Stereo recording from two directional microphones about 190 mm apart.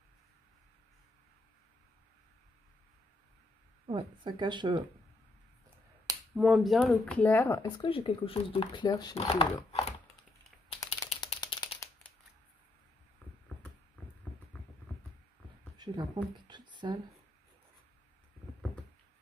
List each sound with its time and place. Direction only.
3.8 s speech: 25° right (ahead or behind)
6.3 s speech: centre (ahead or behind); by 7.7 s 15° left (ahead or behind)
7.8 s speech: 30° left (ahead or behind)
10.7 s typing: 30° left (ahead or behind)
11.4 s a sound: 20° left (ahead or behind)
15.8 s speech: 20° right (ahead or behind)